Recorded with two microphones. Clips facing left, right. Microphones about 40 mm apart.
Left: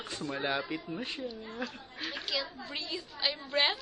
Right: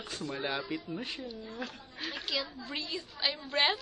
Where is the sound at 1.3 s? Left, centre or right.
Left.